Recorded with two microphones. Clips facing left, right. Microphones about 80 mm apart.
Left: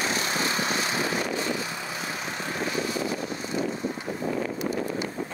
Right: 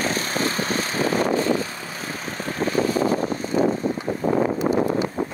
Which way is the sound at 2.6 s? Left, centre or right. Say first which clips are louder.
Right 9 dB; right.